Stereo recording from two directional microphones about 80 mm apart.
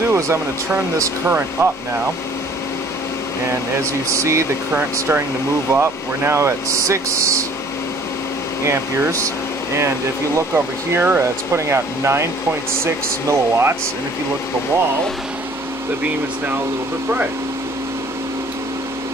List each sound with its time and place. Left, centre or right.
0.0 s a sound: right
0.9 s speech: right
4.1 s speech: right
8.6 s speech: right
10.3 s speech: right